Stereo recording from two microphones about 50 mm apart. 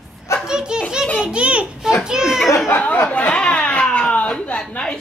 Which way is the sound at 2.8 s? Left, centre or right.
Left.